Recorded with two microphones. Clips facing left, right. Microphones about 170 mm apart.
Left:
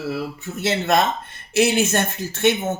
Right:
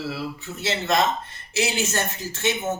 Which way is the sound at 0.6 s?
55° left (ahead or behind).